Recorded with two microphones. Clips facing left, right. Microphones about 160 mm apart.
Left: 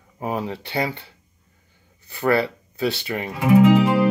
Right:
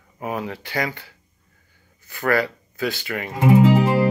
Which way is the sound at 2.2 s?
25° left (ahead or behind).